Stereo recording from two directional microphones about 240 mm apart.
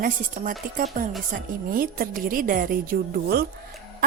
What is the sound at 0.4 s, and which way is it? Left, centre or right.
A woman's voice, right.